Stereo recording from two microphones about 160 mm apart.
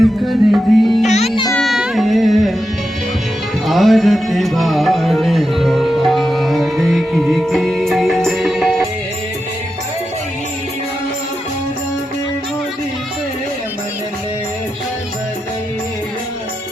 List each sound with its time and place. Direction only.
0.0 s music: centre (ahead or behind)
1.0 s music: 45° left (ahead or behind)
1.5 s music: centre (ahead or behind)
3.7 s music: centre (ahead or behind)